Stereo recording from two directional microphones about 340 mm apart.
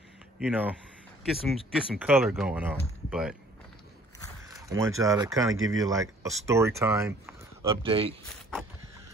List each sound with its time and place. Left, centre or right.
0.4 s speech: centre
4.5 s speech: centre